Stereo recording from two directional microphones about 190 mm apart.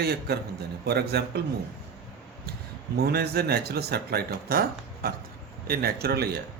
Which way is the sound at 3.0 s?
55° right (ahead or behind).